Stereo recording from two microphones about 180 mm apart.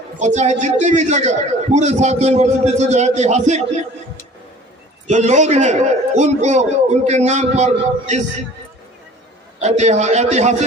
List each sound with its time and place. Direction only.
0.2 s a man's voice: 40° right (ahead or behind)
5.0 s a man's voice: 40° right (ahead or behind)
9.6 s a man's voice: 40° right (ahead or behind)